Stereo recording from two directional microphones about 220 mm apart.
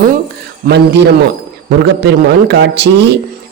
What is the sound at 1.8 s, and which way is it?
A woman's voice, 50° right (ahead or behind).